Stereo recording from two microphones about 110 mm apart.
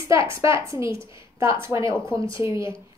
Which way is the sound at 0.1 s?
25° right (ahead or behind).